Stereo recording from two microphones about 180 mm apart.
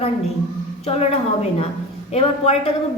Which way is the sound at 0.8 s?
35° left (ahead or behind).